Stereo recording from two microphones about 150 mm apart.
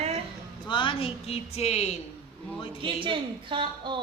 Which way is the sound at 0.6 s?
35° left (ahead or behind).